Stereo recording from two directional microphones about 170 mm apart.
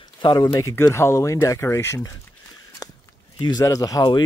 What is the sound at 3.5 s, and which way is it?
Speech, 20° left (ahead or behind).